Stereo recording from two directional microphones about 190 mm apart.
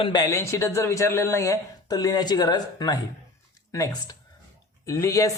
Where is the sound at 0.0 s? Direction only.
20° left (ahead or behind).